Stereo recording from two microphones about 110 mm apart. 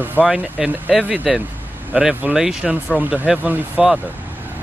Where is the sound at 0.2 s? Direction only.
5° right (ahead or behind).